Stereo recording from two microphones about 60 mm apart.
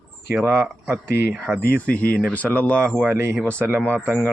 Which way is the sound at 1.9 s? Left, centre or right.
Left.